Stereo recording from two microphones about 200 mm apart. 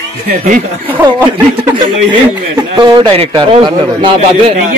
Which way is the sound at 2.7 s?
20° right (ahead or behind).